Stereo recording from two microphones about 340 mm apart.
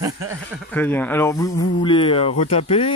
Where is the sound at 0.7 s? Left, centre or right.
Centre.